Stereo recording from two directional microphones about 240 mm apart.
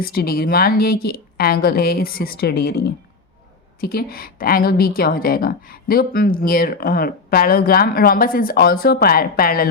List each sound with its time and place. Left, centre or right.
0.0 s a woman's voice: left